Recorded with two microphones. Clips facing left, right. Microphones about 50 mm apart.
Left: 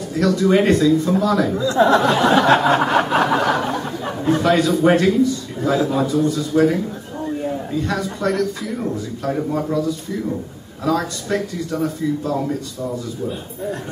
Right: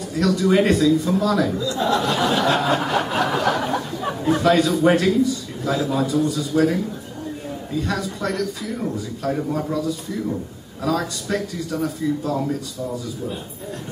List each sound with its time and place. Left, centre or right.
0.1 s a man's voice: centre
1.5 s speech: left
3.3 s a sound: centre
3.6 s a man's voice: centre
5.6 s a man's voice: centre
7.8 s speech: centre